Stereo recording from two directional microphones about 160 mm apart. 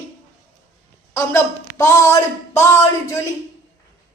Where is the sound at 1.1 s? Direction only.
20° left (ahead or behind).